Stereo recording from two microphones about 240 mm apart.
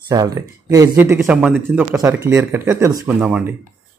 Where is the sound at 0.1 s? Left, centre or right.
Centre.